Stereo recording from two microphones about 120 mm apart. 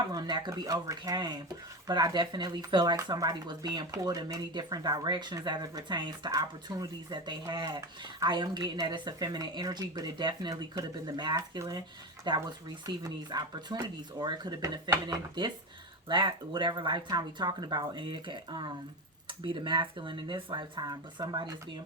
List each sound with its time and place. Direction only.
0.1 s speech: 35° right (ahead or behind)